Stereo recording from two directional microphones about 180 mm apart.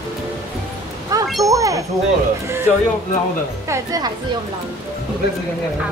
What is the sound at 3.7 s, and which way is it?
Speech, 20° right (ahead or behind).